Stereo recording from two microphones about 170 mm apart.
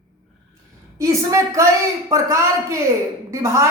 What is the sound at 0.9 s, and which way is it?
Speech, 20° right (ahead or behind).